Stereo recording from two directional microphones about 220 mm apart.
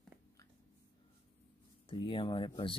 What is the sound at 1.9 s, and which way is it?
Speech, 25° left (ahead or behind).